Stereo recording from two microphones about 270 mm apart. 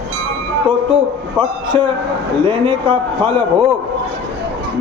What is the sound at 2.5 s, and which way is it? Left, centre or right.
Speech, centre.